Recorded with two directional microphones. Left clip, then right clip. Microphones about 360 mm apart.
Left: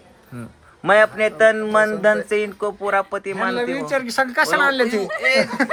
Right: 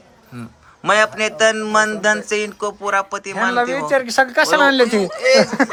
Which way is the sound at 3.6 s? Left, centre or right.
Right.